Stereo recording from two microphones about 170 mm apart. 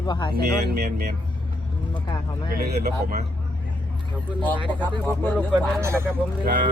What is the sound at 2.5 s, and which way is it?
Speech, 65° right (ahead or behind).